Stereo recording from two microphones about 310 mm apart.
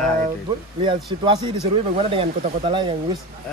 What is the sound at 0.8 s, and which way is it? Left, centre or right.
Speech, centre.